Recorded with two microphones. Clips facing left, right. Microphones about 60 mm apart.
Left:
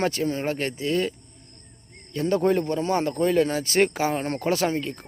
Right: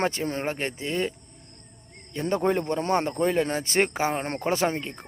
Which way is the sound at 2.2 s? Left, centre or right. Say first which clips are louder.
Left 3 dB; right.